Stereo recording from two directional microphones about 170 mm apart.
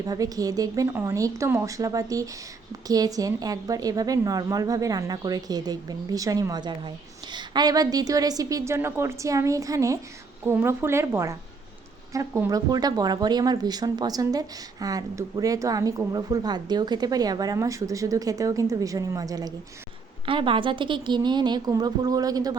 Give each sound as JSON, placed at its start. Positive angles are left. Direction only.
{"t": 0.0, "sound": "a woman's voice", "side_deg": -20}